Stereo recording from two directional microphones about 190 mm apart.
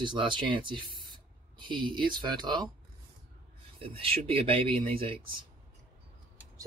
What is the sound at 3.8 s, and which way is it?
Speech, 30° right (ahead or behind).